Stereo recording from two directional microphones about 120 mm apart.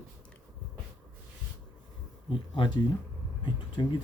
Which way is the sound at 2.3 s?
45° left (ahead or behind).